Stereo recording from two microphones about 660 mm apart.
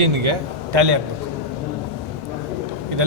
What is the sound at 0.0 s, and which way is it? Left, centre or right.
Speech, right.